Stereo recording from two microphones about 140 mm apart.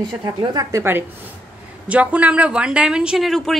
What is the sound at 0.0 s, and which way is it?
A woman's voice, 30° right (ahead or behind).